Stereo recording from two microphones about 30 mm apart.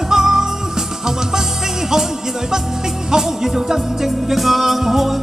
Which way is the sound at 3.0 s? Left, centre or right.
Centre.